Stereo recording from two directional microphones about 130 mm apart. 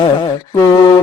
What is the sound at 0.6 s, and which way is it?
Speech, 35° left (ahead or behind).